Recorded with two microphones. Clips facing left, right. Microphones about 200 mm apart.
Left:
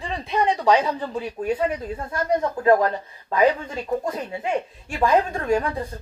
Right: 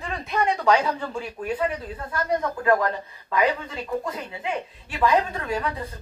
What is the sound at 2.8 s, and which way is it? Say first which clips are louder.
A woman's voice: left 3 dB; 35° left (ahead or behind).